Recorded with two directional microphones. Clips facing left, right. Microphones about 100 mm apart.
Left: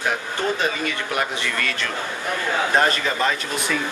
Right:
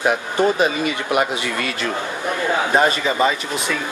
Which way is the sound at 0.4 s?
20° right (ahead or behind).